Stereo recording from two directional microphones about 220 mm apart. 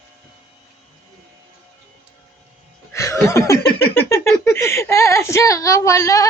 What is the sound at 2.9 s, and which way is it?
Chuckle, 15° left (ahead or behind).